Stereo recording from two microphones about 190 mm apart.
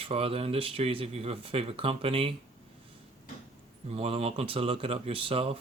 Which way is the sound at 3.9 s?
30° right (ahead or behind).